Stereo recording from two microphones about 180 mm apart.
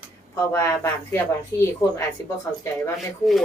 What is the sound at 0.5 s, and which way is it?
A woman's voice, 15° left (ahead or behind).